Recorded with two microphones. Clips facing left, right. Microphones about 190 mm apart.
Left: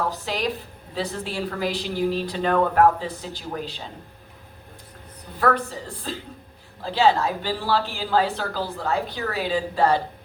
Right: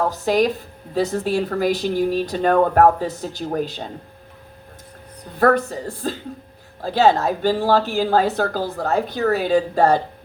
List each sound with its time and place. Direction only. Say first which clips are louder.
0.1 s a woman's voice: right 9 dB; 45° right (ahead or behind)
5.4 s a woman's voice: right 6 dB; 45° right (ahead or behind)